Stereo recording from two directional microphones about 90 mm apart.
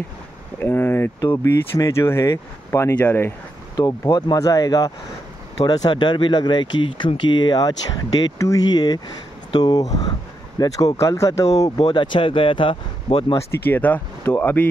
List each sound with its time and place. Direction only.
0.6 s speech: 20° left (ahead or behind)
3.0 s speech: 20° left (ahead or behind)
3.7 s speech: 45° left (ahead or behind)
5.7 s speech: 55° left (ahead or behind); by 8.6 s 40° left (ahead or behind)
8.6 s speech: 50° left (ahead or behind)
11.8 s speech: 60° left (ahead or behind)
13.5 s speech: 20° left (ahead or behind)